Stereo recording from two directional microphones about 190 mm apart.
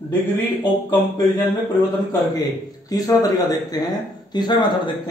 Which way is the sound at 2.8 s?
20° left (ahead or behind).